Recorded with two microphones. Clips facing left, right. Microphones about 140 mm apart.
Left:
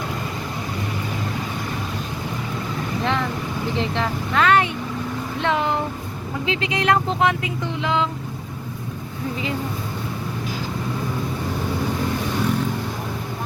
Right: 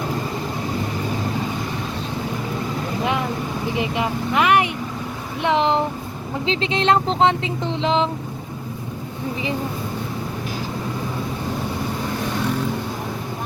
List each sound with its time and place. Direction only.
3.0 s vehicle: 15° right (ahead or behind)
3.8 s speech: 15° right (ahead or behind)
5.4 s a sound: 20° right (ahead or behind)
6.4 s speech: 25° right (ahead or behind)